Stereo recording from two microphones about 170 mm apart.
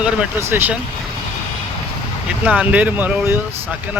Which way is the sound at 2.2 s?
5° right (ahead or behind).